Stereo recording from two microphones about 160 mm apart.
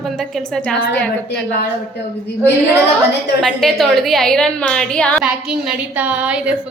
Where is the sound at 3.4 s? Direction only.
Centre (ahead or behind).